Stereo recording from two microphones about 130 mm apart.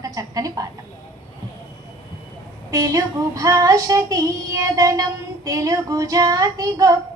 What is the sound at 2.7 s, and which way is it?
A woman's voice, 25° right (ahead or behind).